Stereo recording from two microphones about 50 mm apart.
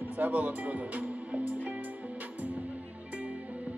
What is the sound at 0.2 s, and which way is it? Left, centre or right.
Speech, right.